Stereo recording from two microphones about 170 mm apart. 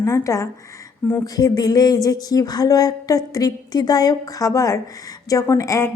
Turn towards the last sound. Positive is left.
turn(degrees=15)  # may be behind; listen again after turning